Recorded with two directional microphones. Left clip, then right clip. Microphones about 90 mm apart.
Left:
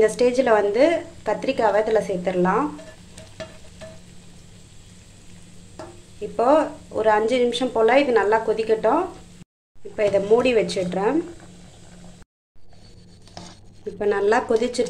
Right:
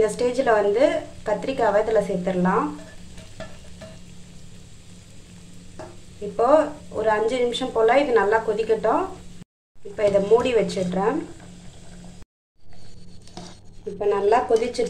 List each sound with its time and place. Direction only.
0.0 s a woman's voice: 40° left (ahead or behind)
6.3 s a woman's voice: 60° left (ahead or behind)
13.9 s a woman's voice: 40° left (ahead or behind)